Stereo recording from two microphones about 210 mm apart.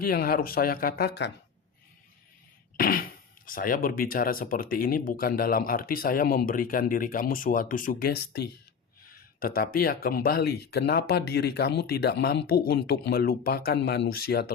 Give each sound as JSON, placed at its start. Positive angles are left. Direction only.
{"t": 0.0, "sound": "speech", "side_deg": 45}
{"t": 2.7, "sound": "speech", "side_deg": 45}